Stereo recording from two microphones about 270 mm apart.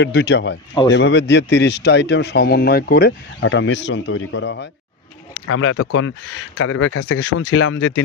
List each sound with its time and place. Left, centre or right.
0.0 s speech: left
7.2 s speech: left